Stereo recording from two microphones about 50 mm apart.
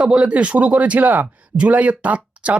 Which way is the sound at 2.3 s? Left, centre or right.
Right.